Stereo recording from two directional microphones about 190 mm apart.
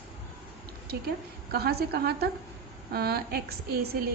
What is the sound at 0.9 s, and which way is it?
A woman's voice, 55° right (ahead or behind).